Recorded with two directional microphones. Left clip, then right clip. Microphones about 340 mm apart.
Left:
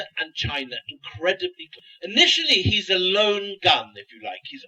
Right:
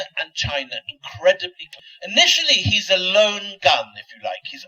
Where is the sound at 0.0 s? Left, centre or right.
Right.